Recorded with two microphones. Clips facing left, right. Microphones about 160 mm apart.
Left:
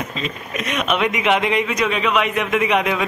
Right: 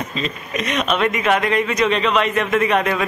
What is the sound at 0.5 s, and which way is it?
Speech, 5° left (ahead or behind).